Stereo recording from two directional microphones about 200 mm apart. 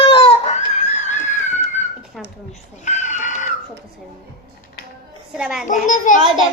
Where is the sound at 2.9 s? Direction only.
35° left (ahead or behind).